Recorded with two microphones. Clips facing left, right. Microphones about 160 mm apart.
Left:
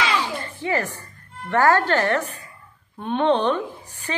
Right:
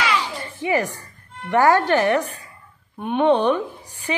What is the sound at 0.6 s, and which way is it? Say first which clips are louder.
A woman's voice: right 4 dB; 15° right (ahead or behind).